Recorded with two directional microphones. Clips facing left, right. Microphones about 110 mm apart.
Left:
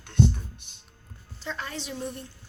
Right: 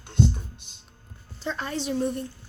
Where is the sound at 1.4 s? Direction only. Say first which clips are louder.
Right 5 dB; 35° right (ahead or behind).